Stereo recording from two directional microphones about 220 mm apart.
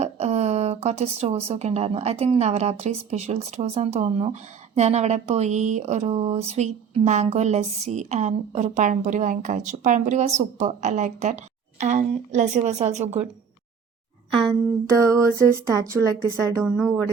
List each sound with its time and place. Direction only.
0.0 s a woman's voice: 30° right (ahead or behind)
14.8 s a woman's voice: 15° right (ahead or behind)
16.7 s speech: centre (ahead or behind)